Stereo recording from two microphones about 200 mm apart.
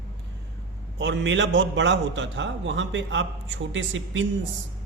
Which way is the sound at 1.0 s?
60° right (ahead or behind).